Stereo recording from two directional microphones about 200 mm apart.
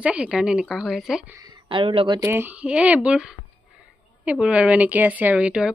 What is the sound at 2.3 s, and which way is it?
A woman's voice, 10° right (ahead or behind).